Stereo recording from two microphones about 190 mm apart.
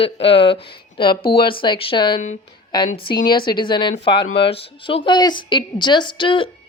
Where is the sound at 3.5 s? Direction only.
25° left (ahead or behind).